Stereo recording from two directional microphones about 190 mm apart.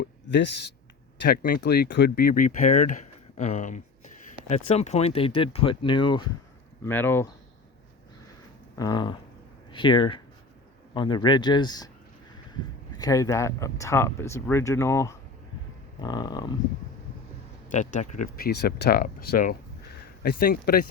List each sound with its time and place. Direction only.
0.0 s speech: 65° left (ahead or behind)
1.2 s speech: 50° left (ahead or behind); by 6.2 s 25° left (ahead or behind)
6.8 s speech: 10° left (ahead or behind)
8.8 s speech: 20° left (ahead or behind)
13.0 s speech: 15° left (ahead or behind)
17.7 s speech: 40° left (ahead or behind)